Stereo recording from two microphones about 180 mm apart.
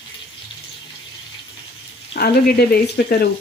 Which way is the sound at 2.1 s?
60° left (ahead or behind).